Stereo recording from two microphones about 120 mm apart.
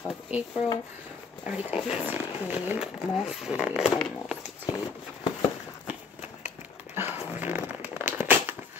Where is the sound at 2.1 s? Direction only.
15° right (ahead or behind).